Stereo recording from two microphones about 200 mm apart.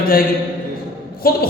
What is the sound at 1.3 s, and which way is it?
Speech, 50° left (ahead or behind).